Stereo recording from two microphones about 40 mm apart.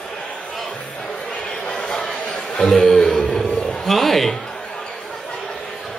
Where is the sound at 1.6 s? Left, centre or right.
Centre.